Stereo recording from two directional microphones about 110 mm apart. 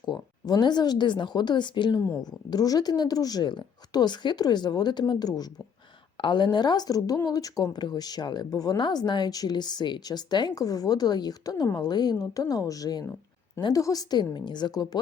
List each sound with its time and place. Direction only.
0.0 s speech: 40° left (ahead or behind)
2.0 s speech: 25° left (ahead or behind)
2.5 s speech: 35° left (ahead or behind)